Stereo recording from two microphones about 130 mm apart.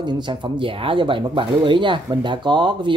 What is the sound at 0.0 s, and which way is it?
Speech, 35° right (ahead or behind).